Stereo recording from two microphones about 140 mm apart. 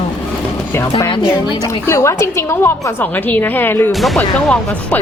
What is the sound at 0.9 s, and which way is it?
Speech, 30° left (ahead or behind).